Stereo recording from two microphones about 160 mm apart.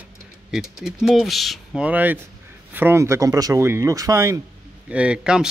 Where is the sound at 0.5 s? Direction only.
5° right (ahead or behind).